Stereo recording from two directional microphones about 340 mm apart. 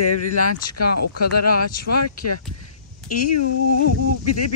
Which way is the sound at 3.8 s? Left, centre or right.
Left.